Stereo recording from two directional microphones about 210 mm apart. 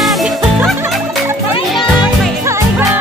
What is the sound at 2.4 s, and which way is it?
Music, 15° right (ahead or behind).